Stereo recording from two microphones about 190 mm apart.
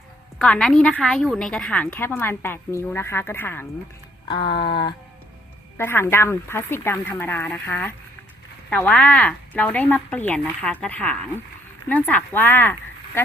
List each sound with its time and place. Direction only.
0.3 s a woman's voice: 5° left (ahead or behind)
4.3 s a sound: 25° left (ahead or behind)
5.7 s a woman's voice: 10° left (ahead or behind)